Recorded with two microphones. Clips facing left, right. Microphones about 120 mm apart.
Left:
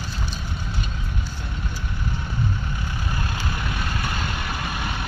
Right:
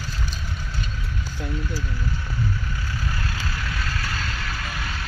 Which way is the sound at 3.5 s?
20° left (ahead or behind).